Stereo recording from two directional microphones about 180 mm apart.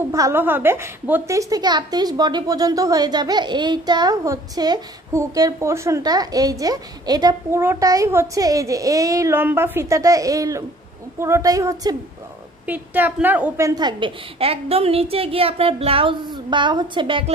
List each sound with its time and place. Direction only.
0.1 s a woman's voice: 15° right (ahead or behind)
12.6 s a woman's voice: 10° right (ahead or behind); by 17.2 s 25° right (ahead or behind)